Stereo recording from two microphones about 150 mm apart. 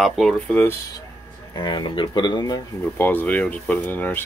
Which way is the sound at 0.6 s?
15° left (ahead or behind).